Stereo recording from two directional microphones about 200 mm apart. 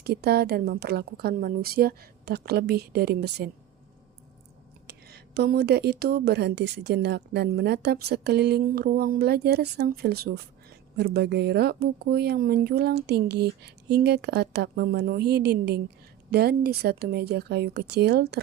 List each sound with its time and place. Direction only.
0.0 s speech: 50° right (ahead or behind)
4.9 s speech: 55° right (ahead or behind)